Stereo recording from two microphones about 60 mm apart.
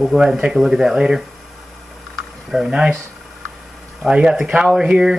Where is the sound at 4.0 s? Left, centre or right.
Centre.